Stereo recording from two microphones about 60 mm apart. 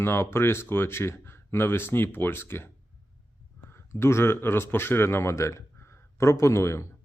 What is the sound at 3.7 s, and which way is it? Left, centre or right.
Speech, left.